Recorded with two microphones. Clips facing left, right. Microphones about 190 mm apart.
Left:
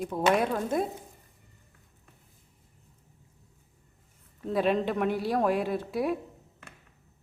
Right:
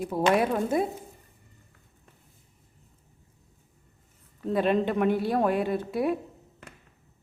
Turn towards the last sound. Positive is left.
turn(degrees=0)  # may be behind; listen again after turning